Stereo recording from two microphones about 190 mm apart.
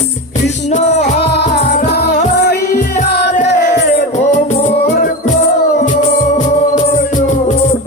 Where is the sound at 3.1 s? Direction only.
60° left (ahead or behind).